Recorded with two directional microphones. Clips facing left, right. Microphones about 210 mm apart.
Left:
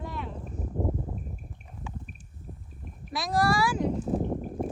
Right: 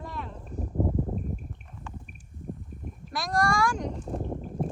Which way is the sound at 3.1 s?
Centre (ahead or behind).